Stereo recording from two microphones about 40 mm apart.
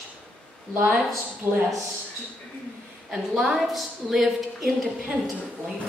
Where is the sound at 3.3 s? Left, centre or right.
Centre.